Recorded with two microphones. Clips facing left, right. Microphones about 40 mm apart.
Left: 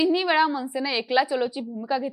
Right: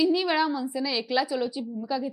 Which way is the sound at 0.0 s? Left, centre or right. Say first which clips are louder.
Left 3 dB; left.